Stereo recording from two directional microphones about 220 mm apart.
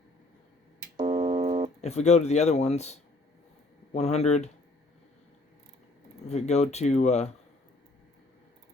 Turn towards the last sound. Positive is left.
turn(degrees=30)  # may be behind; listen again after turning